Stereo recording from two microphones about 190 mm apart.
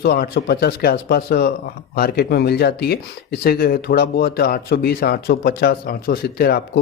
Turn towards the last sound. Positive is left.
turn(degrees=55)  # may be behind; listen again after turning